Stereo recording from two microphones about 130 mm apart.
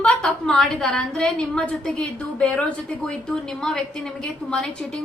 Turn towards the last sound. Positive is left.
turn(degrees=5)  # may be behind; listen again after turning